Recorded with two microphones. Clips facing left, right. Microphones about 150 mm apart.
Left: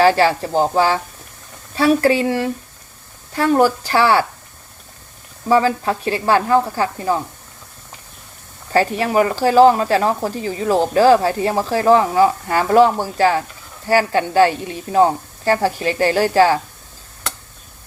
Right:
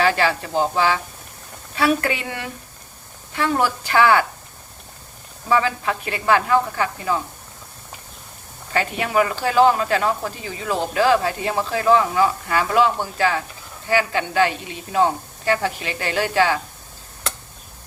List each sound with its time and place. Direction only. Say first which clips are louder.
0.0 s speech: left 6 dB; 35° left (ahead or behind)
5.5 s speech: left 5 dB; 35° left (ahead or behind)
8.7 s speech: left 5 dB; 35° left (ahead or behind)